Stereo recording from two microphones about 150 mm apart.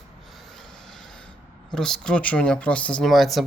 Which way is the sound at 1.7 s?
5° left (ahead or behind).